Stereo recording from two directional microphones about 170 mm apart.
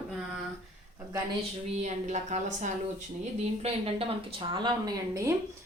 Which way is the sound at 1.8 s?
45° right (ahead or behind).